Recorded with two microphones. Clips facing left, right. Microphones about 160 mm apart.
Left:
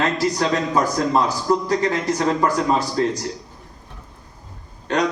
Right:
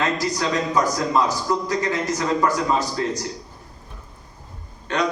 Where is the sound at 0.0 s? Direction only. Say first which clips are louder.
Left 3 dB; 35° left (ahead or behind).